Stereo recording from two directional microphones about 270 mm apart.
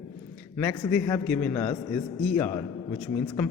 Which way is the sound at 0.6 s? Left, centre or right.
Centre.